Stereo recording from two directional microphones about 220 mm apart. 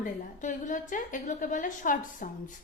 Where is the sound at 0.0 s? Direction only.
35° left (ahead or behind).